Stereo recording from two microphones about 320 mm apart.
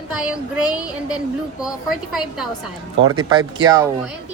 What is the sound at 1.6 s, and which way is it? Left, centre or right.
Speech, centre.